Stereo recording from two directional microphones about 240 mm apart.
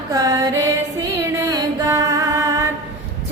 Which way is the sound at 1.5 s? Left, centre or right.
Centre.